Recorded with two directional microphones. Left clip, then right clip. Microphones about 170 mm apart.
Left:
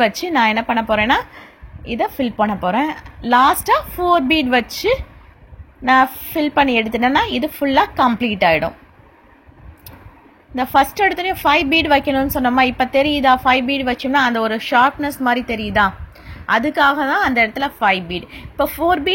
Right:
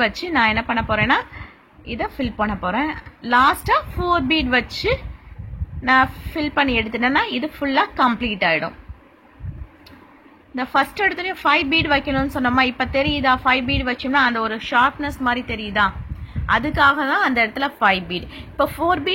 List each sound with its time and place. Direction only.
0.0 s a woman's voice: 25° left (ahead or behind)
10.5 s a woman's voice: 30° left (ahead or behind)
16.4 s a woman's voice: 30° left (ahead or behind)